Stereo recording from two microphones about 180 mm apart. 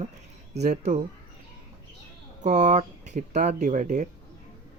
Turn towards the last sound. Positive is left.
turn(degrees=-45)  # may be behind; listen again after turning